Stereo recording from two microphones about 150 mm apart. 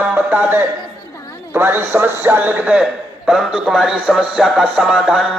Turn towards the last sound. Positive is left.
turn(degrees=-5)  # may be behind; listen again after turning